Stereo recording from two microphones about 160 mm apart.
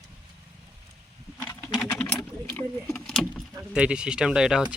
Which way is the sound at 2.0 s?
10° left (ahead or behind).